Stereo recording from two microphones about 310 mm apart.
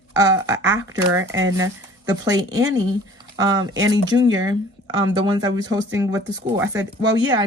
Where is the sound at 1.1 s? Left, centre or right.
Right.